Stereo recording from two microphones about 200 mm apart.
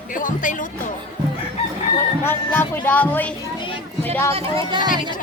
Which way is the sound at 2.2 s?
10° left (ahead or behind).